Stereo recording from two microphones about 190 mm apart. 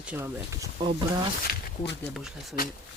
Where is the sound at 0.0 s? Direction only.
10° right (ahead or behind).